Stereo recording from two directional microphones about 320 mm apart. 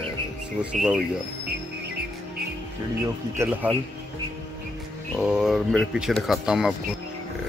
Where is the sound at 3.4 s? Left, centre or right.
Centre.